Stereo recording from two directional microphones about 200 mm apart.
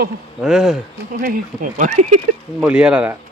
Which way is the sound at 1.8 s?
35° right (ahead or behind).